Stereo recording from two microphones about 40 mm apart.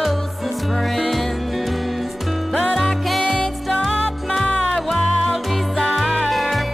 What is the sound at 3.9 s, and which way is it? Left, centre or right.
Music, left.